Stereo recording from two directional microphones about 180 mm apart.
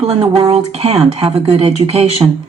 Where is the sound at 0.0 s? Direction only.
30° right (ahead or behind).